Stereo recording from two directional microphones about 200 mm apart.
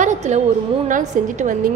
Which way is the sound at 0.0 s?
35° right (ahead or behind).